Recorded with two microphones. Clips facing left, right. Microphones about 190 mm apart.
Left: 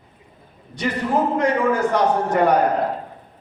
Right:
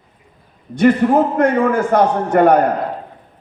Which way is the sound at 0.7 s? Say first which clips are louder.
Right 9 dB; 50° right (ahead or behind).